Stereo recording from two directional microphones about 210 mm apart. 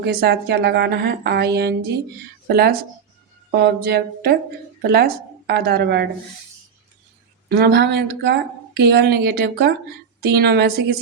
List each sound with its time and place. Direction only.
0.0 s a woman's voice: 50° right (ahead or behind)
7.4 s a woman's voice: 50° right (ahead or behind)